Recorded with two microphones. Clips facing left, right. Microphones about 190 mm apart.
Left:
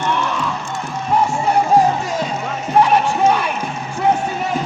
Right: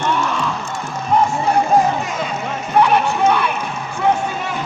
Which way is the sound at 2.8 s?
35° left (ahead or behind).